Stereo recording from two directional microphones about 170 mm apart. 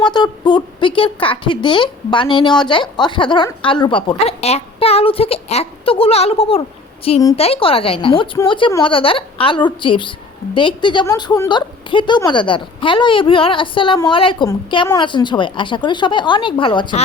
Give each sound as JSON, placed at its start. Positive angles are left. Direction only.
{"t": 0.0, "sound": "a woman's voice", "side_deg": 25}